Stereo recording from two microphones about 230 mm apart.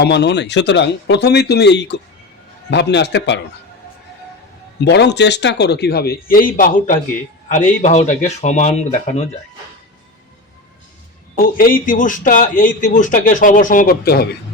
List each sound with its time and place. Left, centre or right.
0.0 s speech: left
4.9 s a man's voice: left
11.3 s a man's voice: left